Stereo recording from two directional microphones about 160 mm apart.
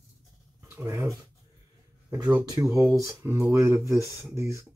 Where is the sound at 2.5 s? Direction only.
20° right (ahead or behind).